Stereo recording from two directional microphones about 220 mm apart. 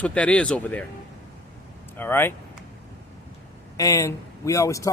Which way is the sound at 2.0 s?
10° left (ahead or behind).